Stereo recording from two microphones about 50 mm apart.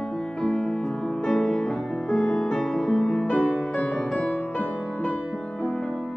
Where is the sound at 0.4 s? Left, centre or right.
Centre.